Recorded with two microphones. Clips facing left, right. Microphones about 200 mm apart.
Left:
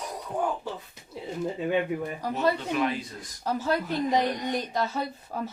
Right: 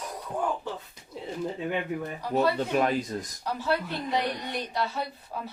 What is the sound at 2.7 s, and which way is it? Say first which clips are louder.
Speech: right 2 dB; 45° right (ahead or behind).